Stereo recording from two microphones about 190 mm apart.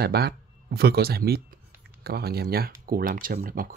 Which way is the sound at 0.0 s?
55° right (ahead or behind).